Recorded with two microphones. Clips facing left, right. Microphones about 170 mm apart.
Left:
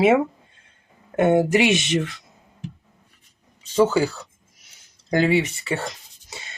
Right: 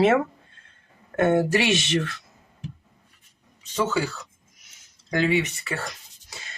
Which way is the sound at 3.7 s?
35° left (ahead or behind).